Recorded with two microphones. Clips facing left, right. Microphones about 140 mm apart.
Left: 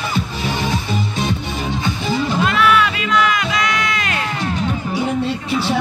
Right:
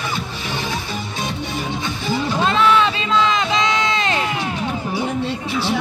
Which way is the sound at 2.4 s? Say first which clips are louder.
Right 2 dB; 25° right (ahead or behind).